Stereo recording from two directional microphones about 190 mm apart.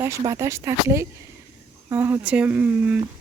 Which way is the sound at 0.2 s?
15° right (ahead or behind).